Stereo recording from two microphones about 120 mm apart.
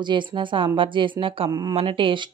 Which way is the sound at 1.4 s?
35° right (ahead or behind).